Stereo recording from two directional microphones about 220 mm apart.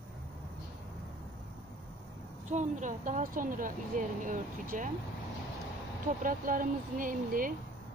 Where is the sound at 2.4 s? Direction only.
35° right (ahead or behind).